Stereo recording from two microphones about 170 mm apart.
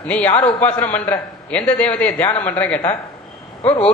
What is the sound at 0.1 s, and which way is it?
A man's voice, 10° left (ahead or behind).